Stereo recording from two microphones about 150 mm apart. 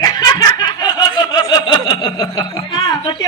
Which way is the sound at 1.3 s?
30° left (ahead or behind).